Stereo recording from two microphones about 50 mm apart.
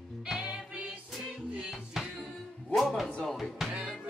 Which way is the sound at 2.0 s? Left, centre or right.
Centre.